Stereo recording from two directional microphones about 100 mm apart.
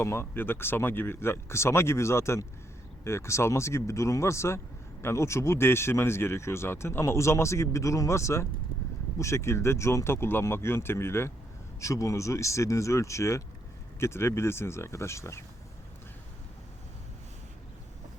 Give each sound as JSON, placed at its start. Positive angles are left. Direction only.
{"t": 0.0, "sound": "speech", "side_deg": 25}